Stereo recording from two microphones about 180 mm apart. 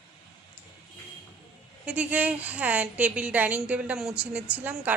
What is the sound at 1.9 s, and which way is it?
A woman's voice, 10° right (ahead or behind).